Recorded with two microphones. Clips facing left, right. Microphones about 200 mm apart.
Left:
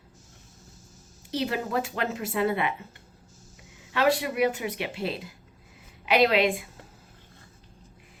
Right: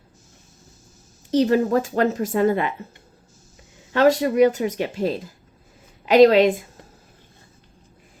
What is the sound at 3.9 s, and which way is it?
A woman's voice, 40° right (ahead or behind).